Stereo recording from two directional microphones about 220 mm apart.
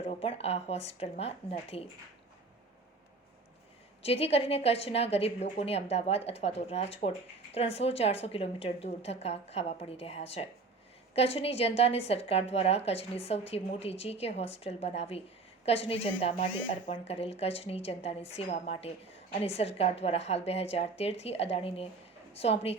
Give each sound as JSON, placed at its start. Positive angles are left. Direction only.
{"t": 0.1, "sound": "a woman's voice", "side_deg": 25}
{"t": 4.0, "sound": "a woman's voice", "side_deg": 25}
{"t": 16.9, "sound": "a woman's voice", "side_deg": 25}